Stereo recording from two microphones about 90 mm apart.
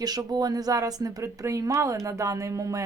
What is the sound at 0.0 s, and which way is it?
Speech, 45° right (ahead or behind).